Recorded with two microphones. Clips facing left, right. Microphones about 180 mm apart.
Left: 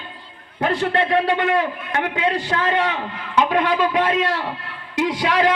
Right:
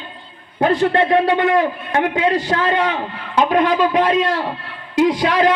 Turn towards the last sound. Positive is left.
turn(degrees=-35)  # may be behind; listen again after turning